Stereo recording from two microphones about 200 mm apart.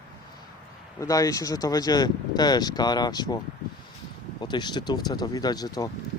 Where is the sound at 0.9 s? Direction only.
15° left (ahead or behind).